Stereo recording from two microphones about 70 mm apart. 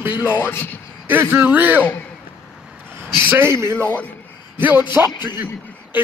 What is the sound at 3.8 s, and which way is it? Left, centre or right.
Speech, left.